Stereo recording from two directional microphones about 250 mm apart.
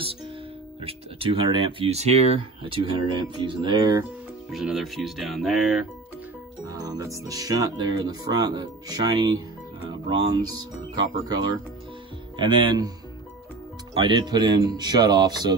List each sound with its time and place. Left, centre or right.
0.7 s speech: right
4.5 s speech: centre
6.6 s speech: centre
13.9 s speech: centre